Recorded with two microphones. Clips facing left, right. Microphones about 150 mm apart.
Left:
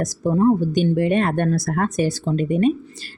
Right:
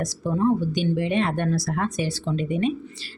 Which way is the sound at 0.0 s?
45° left (ahead or behind).